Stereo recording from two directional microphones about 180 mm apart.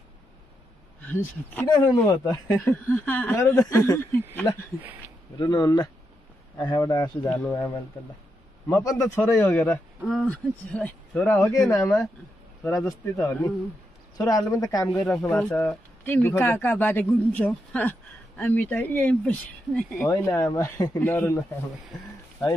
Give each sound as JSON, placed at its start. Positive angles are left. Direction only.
{"t": 1.0, "sound": "speech", "side_deg": 10}
{"t": 15.0, "sound": "speech", "side_deg": 0}
{"t": 20.1, "sound": "speech", "side_deg": 20}